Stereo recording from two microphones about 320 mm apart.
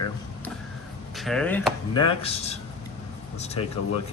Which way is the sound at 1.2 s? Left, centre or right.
Centre.